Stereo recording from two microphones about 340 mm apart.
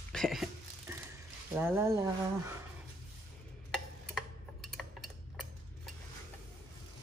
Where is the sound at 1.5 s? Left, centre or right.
Centre.